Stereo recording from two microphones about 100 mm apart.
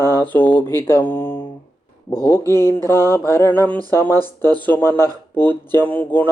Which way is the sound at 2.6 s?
25° left (ahead or behind).